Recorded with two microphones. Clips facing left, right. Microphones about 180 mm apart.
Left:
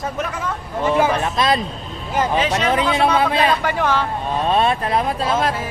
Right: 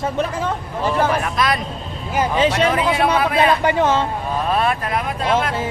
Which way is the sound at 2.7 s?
25° left (ahead or behind).